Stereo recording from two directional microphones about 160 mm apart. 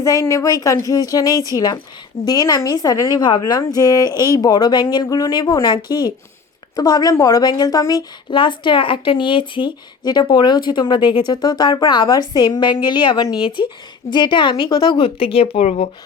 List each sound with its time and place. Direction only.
0.0 s a woman's voice: 20° left (ahead or behind); by 15.9 s 40° left (ahead or behind)